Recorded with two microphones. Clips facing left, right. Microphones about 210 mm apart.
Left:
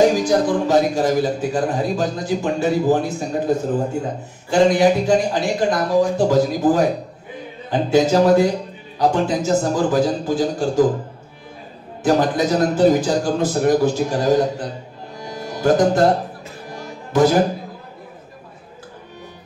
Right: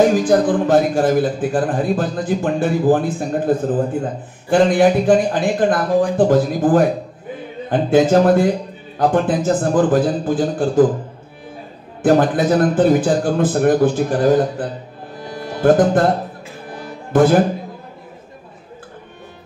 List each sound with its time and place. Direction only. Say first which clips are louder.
0.0 s a man's voice: right 2 dB; 55° right (ahead or behind)
12.0 s a man's voice: right 3 dB; 55° right (ahead or behind)
15.1 s music: right 2 dB; 55° right (ahead or behind)
17.1 s speech: right 2 dB; 55° right (ahead or behind)